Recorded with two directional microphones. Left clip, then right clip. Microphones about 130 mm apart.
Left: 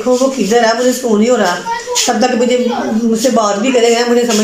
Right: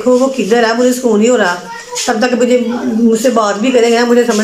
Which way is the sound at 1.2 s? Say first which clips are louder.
Right 2 dB; centre (ahead or behind).